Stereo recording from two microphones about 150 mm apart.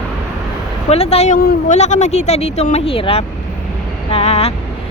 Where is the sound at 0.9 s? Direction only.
45° left (ahead or behind).